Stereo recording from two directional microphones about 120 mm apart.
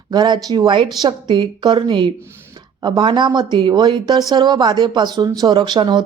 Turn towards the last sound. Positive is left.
turn(degrees=-40)  # may be behind; listen again after turning